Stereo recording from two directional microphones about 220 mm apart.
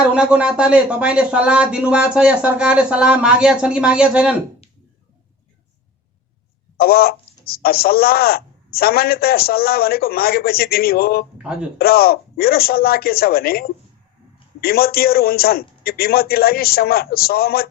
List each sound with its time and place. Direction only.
0.1 s speech: 5° right (ahead or behind)
6.7 s speech: 45° left (ahead or behind)